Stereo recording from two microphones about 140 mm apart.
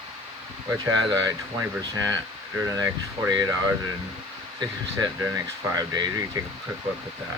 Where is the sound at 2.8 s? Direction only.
20° right (ahead or behind).